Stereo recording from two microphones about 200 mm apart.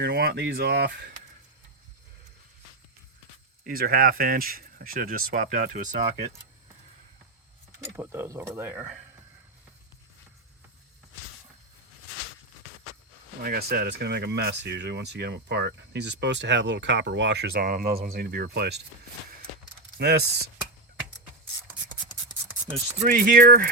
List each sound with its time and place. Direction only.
0.0 s speech: 50° right (ahead or behind)
3.7 s speech: 45° right (ahead or behind)
7.9 s speech: 10° right (ahead or behind)
13.4 s speech: 50° right (ahead or behind)
20.0 s speech: 55° right (ahead or behind)
23.0 s speech: 40° right (ahead or behind)